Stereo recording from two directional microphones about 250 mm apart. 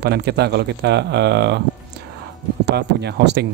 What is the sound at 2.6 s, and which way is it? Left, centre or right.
Speech, right.